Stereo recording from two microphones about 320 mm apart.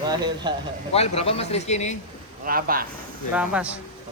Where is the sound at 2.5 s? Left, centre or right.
Right.